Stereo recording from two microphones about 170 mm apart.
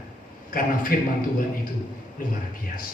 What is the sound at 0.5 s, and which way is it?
Speech, 55° left (ahead or behind).